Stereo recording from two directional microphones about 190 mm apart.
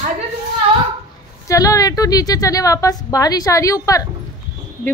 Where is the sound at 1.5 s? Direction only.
15° left (ahead or behind).